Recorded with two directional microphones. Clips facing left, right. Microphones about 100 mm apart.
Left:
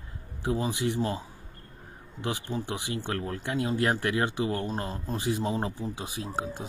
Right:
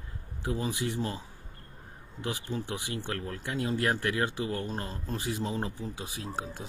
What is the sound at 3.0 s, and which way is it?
Speech, 35° left (ahead or behind).